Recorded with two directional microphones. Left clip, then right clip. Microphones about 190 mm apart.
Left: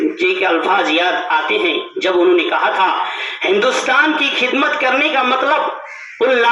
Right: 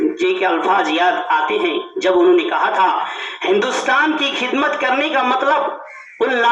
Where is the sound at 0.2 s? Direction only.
70° right (ahead or behind).